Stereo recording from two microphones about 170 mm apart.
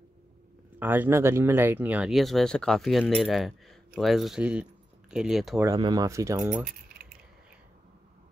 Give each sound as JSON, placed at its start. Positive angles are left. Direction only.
{"t": 0.7, "sound": "speech", "side_deg": -10}
{"t": 5.8, "sound": "speech", "side_deg": -25}